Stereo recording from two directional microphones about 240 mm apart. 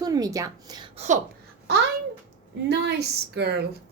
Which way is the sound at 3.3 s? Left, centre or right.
Right.